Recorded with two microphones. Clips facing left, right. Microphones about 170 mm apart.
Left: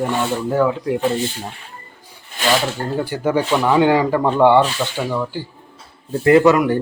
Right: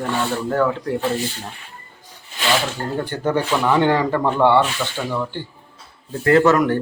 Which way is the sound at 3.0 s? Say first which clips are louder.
Left 2 dB; 10° left (ahead or behind).